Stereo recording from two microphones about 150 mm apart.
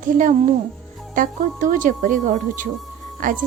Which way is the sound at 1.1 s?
60° right (ahead or behind).